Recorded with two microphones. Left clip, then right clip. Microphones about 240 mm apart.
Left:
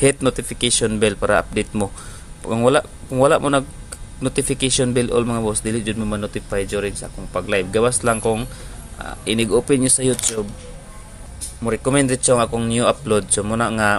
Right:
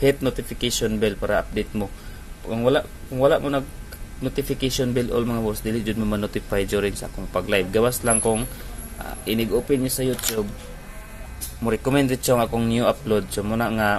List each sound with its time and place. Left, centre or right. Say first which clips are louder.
0.0 s speech: left 3 dB; centre
11.6 s speech: left 3 dB; centre